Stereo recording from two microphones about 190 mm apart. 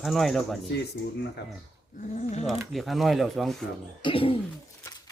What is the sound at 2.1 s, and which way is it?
Speech, 35° left (ahead or behind).